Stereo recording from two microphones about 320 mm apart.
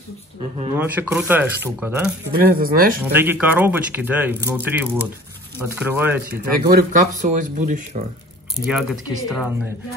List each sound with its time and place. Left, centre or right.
0.7 s speech: centre
2.2 s speech: right
3.0 s speech: centre
6.6 s speech: right
8.5 s speech: centre